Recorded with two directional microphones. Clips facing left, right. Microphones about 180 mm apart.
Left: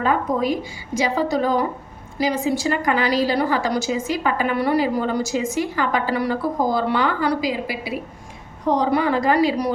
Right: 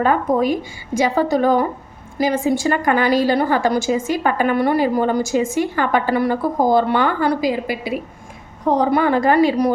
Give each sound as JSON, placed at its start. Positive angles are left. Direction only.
{"t": 0.0, "sound": "a woman's voice", "side_deg": -50}